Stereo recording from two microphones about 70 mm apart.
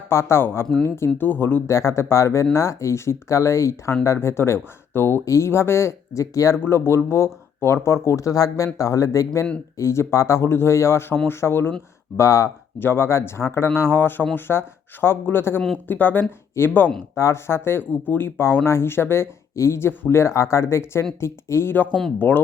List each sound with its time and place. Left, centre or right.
0.1 s speech: left
1.3 s speech: left
1.6 s speech: left
5.2 s speech: left
6.7 s speech: left
8.0 s speech: left
17.2 s speech: left